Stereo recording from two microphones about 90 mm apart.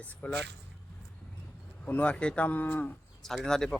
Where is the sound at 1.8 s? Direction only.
15° left (ahead or behind).